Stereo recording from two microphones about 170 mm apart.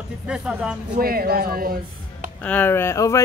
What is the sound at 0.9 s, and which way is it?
Speech, 60° right (ahead or behind).